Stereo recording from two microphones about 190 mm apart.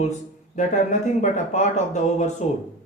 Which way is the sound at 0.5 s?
40° left (ahead or behind).